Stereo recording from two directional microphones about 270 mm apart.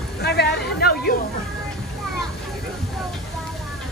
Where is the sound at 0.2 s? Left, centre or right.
Left.